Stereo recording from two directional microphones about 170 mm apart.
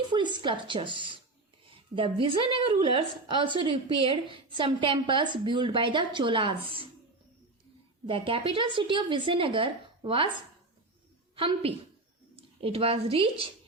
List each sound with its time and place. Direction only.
0.1 s a woman's voice: 25° right (ahead or behind)
8.0 s a woman's voice: 30° right (ahead or behind)
11.3 s a woman's voice: 30° right (ahead or behind)